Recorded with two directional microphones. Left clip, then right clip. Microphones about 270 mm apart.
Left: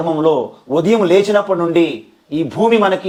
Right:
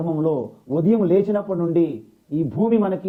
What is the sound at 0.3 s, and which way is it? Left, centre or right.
Speech, left.